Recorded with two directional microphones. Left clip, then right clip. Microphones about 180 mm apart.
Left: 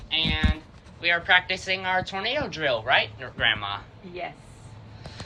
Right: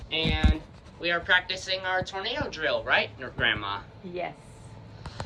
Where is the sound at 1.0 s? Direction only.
20° right (ahead or behind).